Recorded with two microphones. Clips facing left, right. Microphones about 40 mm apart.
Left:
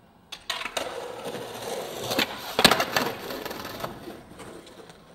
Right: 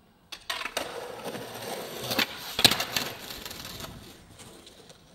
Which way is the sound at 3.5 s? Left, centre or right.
Left.